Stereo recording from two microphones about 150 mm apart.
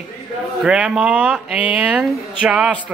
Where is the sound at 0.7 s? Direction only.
5° right (ahead or behind).